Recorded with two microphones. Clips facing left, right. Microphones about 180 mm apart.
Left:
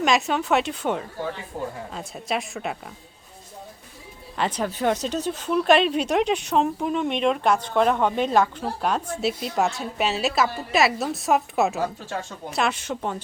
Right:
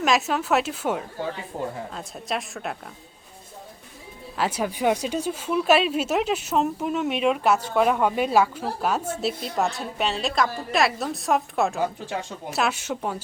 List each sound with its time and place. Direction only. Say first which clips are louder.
0.0 s a woman's voice: left 1 dB; centre (ahead or behind)
1.5 s speech: right 1 dB; 25° right (ahead or behind)
1.9 s a woman's voice: left 2 dB; centre (ahead or behind)
4.4 s a woman's voice: even; 10° right (ahead or behind)